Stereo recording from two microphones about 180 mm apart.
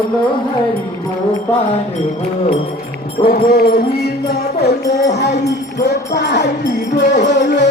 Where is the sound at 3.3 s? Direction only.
60° left (ahead or behind).